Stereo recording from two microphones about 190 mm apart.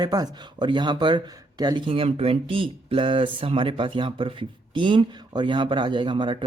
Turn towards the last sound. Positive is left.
turn(degrees=-25)  # may be behind; listen again after turning